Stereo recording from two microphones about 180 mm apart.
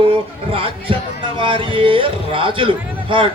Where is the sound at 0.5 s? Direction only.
30° right (ahead or behind).